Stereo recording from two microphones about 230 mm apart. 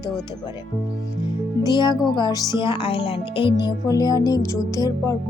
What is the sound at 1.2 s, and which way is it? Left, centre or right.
A woman's voice, centre.